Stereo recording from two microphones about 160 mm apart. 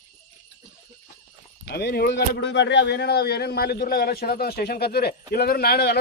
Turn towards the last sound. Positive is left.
turn(degrees=80)